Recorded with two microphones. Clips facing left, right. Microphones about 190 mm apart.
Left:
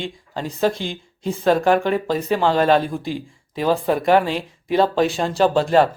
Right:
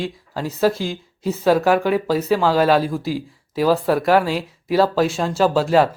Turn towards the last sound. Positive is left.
turn(degrees=-5)  # may be behind; listen again after turning